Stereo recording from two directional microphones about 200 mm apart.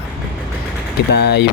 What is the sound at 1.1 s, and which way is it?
Speech, 55° left (ahead or behind).